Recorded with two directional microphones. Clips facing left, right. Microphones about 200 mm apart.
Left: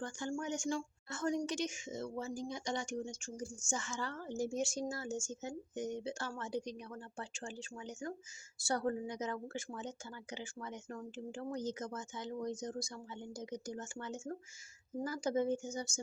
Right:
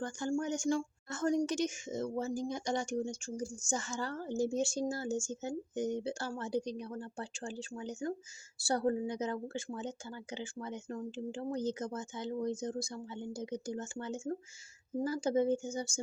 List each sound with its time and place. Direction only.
0.0 s a woman's voice: 40° right (ahead or behind)